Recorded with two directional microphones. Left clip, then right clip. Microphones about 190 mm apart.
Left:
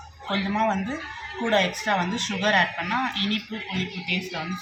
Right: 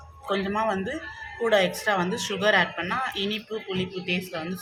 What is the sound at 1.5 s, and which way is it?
Speech, 50° right (ahead or behind).